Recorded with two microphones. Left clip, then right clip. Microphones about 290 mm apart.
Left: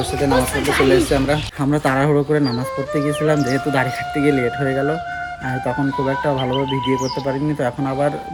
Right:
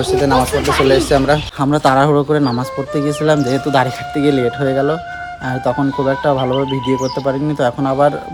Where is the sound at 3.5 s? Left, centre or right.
Centre.